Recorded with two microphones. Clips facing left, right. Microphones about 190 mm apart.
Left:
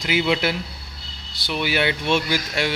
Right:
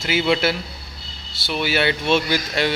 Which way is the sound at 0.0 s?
15° left (ahead or behind).